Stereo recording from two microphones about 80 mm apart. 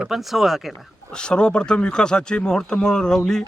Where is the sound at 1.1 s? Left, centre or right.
Centre.